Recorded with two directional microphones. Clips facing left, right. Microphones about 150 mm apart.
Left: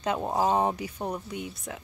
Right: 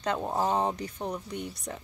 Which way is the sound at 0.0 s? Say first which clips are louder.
Left 2 dB; 10° left (ahead or behind).